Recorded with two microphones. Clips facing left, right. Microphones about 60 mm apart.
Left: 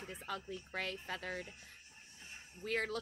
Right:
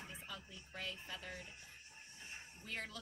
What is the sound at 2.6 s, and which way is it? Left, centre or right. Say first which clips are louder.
Speech: left 10 dB; left.